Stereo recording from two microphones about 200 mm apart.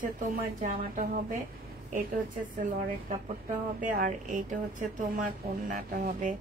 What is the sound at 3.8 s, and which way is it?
Speech, 45° right (ahead or behind).